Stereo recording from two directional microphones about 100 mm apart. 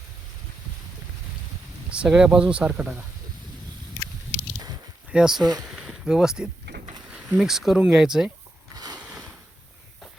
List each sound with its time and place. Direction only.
1.9 s speech: 10° right (ahead or behind)
5.1 s speech: 5° right (ahead or behind)
5.4 s speech: 40° right (ahead or behind)
5.8 s speech: 5° right (ahead or behind)
8.7 s a sound: 40° right (ahead or behind)